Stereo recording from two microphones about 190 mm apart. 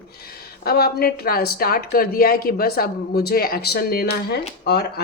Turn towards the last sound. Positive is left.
turn(degrees=60)  # may be behind; listen again after turning